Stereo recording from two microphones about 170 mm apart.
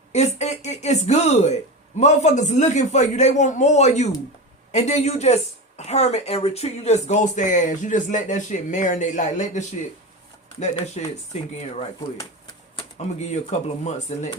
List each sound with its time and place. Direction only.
0.1 s speech: 40° left (ahead or behind)
11.0 s speech: 40° left (ahead or behind)
12.7 s speech: 40° left (ahead or behind)